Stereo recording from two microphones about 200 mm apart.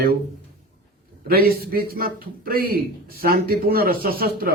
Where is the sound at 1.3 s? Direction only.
50° right (ahead or behind).